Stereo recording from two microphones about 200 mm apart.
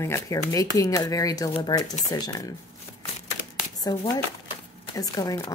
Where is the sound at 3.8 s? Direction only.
20° left (ahead or behind).